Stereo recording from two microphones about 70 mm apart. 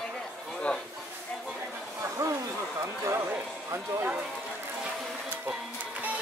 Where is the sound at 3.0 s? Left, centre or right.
Right.